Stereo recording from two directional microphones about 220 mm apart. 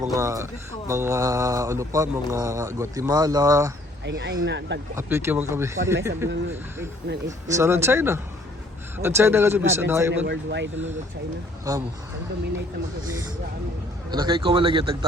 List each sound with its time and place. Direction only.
0.0 s speech: 15° right (ahead or behind)
4.0 s a man's voice: 50° right (ahead or behind)
4.9 s speech: 10° right (ahead or behind)
7.5 s speech: 10° right (ahead or behind)
10.2 s a man's voice: 50° right (ahead or behind)
11.7 s speech: 15° right (ahead or behind)
14.1 s a man's voice: 20° right (ahead or behind)